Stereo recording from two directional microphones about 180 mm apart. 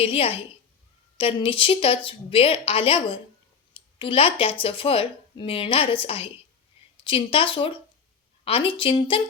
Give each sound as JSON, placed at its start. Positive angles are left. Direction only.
{"t": 0.0, "sound": "a woman's voice", "side_deg": 30}